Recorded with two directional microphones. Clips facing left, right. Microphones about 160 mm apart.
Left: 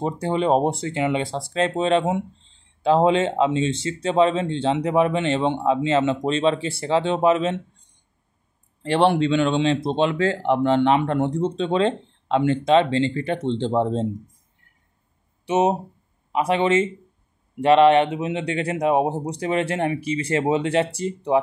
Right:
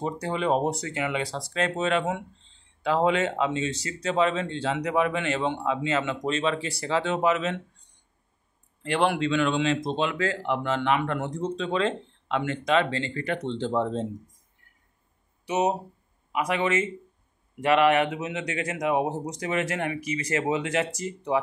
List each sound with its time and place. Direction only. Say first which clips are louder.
0.0 s speech: left 5 dB; 25° left (ahead or behind)
8.8 s speech: left 6 dB; 30° left (ahead or behind)
15.4 s speech: left 5 dB; 25° left (ahead or behind)